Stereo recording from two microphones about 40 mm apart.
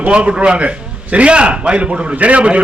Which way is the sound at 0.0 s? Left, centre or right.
Right.